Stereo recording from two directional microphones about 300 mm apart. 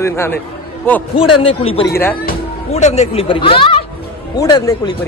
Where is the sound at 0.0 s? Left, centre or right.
Centre.